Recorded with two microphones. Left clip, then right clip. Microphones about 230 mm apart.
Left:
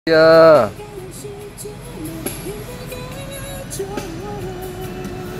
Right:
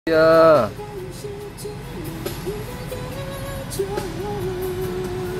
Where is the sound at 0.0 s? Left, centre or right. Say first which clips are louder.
Left 4 dB; centre.